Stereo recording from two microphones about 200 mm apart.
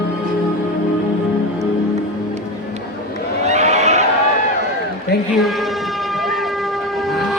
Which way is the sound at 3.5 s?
35° right (ahead or behind).